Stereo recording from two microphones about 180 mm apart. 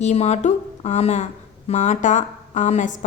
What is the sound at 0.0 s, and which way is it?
A woman's voice, 40° left (ahead or behind).